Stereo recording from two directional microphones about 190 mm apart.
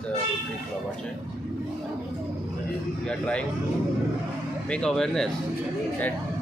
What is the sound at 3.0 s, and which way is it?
Speech, 5° left (ahead or behind).